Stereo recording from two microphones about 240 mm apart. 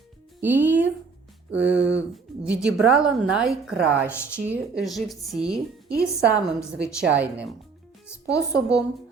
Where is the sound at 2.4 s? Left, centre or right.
Centre.